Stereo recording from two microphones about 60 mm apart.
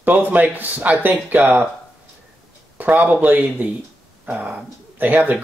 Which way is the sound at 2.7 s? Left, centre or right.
Right.